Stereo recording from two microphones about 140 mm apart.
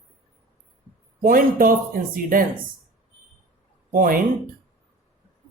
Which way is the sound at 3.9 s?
85° right.